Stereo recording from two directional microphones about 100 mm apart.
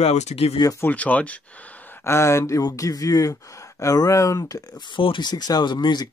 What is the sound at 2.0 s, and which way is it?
Speech, 25° left (ahead or behind).